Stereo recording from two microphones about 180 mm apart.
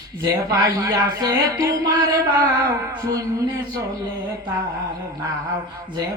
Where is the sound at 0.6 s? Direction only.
20° right (ahead or behind).